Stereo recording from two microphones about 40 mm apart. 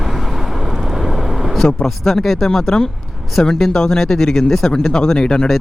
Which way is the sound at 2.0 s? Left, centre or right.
Centre.